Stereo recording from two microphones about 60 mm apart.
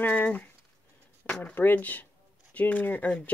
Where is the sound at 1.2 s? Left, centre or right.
Centre.